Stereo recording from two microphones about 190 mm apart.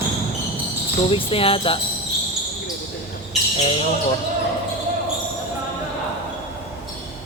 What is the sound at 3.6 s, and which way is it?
Mantra, 30° left (ahead or behind).